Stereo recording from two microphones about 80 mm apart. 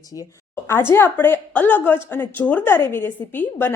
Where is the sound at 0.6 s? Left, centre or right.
Left.